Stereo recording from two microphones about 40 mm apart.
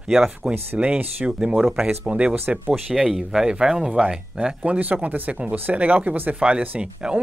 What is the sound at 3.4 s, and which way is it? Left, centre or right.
Speech, right.